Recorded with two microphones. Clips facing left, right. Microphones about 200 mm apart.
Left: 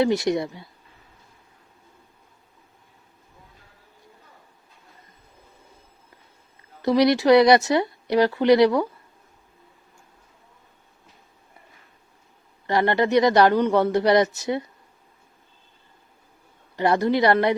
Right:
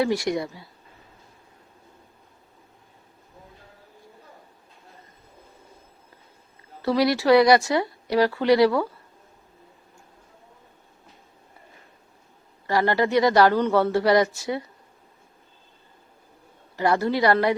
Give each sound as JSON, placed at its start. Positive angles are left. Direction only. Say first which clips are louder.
{"t": 0.0, "sound": "speech", "louder": "left 3 dB", "side_deg": 20}
{"t": 6.8, "sound": "speech", "louder": "left 3 dB", "side_deg": 20}
{"t": 12.6, "sound": "speech", "louder": "left 1 dB", "side_deg": 20}
{"t": 16.7, "sound": "speech", "louder": "left 2 dB", "side_deg": 20}